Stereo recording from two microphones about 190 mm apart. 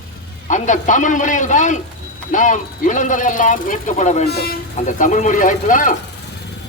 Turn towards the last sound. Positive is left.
turn(degrees=45)  # may be behind; listen again after turning